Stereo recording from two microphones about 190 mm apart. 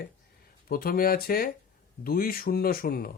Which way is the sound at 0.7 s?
50° left (ahead or behind).